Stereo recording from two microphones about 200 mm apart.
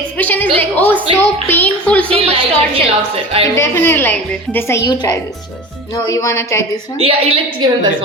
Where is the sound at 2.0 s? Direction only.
30° right (ahead or behind).